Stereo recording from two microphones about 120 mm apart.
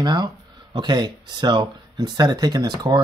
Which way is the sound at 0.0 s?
35° right (ahead or behind).